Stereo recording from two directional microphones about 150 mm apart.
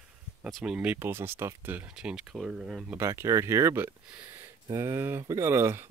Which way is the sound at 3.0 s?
20° right (ahead or behind).